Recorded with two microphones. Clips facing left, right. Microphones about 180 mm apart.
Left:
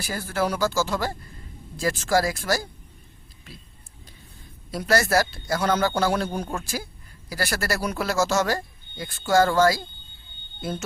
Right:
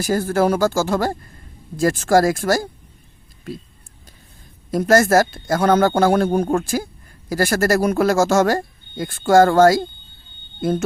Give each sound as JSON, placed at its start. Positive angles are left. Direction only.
{"t": 0.0, "sound": "speech", "side_deg": -45}
{"t": 4.7, "sound": "speech", "side_deg": -45}